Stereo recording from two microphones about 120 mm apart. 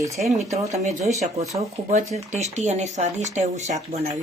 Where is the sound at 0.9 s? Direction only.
75° right (ahead or behind).